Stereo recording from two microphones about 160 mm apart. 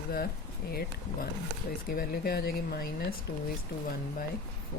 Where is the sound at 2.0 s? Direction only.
85° left.